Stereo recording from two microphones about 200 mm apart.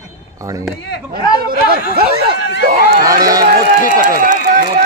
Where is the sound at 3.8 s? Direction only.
40° right (ahead or behind).